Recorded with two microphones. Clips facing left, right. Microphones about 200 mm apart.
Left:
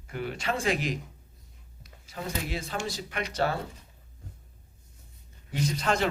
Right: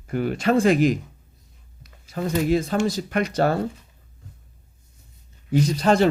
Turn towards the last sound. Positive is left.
turn(degrees=-35)  # may be behind; listen again after turning